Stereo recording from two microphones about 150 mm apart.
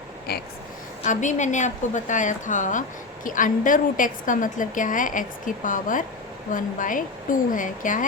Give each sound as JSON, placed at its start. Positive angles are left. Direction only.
{"t": 1.0, "sound": "a woman's voice", "side_deg": 55}